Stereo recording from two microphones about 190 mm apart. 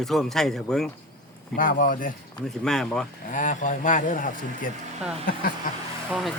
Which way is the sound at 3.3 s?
40° left (ahead or behind).